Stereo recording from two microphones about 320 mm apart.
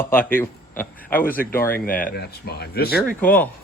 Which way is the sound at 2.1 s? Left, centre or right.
Left.